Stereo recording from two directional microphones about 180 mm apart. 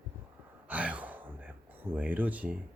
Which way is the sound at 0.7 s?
5° right (ahead or behind).